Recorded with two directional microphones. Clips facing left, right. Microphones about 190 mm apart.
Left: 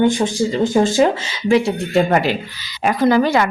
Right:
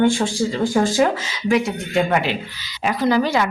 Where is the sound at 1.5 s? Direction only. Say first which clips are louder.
Left 4 dB; 40° left (ahead or behind).